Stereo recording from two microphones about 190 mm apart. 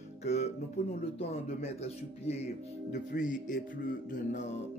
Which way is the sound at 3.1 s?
45° left (ahead or behind).